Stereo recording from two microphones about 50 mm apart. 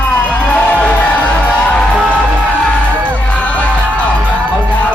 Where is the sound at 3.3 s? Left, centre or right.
Left.